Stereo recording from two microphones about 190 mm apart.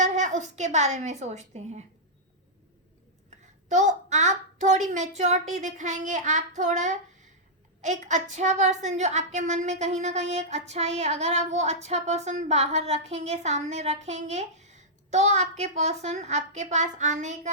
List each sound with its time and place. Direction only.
0.0 s a woman's voice: 40° right (ahead or behind)
3.2 s a woman's voice: 40° right (ahead or behind)